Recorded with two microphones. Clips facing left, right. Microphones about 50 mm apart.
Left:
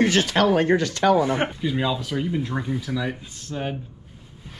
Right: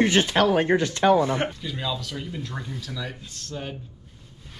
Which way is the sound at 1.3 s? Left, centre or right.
Centre.